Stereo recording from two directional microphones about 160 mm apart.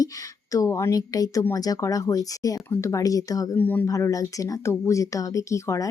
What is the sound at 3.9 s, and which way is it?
Speech, 20° left (ahead or behind).